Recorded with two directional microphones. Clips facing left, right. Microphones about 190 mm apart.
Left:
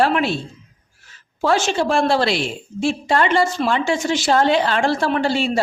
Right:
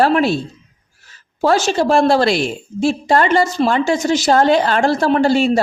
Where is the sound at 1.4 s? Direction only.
40° right (ahead or behind).